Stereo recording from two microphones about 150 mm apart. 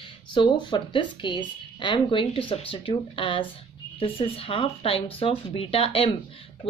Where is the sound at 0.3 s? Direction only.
30° left (ahead or behind).